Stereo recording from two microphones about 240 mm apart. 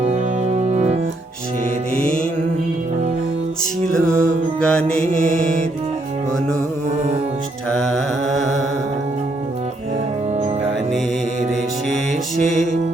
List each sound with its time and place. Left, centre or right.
0.0 s music: right
4.2 s music: centre
7.8 s mantra: centre